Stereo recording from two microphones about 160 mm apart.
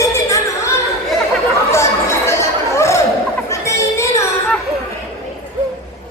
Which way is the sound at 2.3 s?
15° left (ahead or behind).